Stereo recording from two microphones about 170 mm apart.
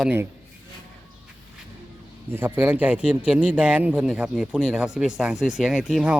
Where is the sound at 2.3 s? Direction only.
10° right (ahead or behind).